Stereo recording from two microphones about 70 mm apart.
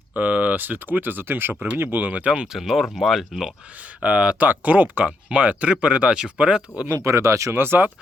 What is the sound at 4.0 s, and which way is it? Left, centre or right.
Speech, centre.